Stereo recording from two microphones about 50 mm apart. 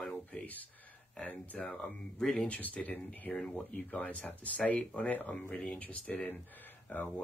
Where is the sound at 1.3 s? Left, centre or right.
Left.